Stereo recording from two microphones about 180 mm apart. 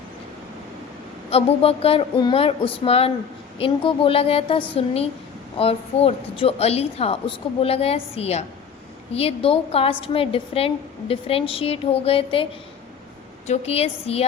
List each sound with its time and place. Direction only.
1.3 s a woman's voice: 35° left (ahead or behind)
13.5 s a woman's voice: 35° left (ahead or behind)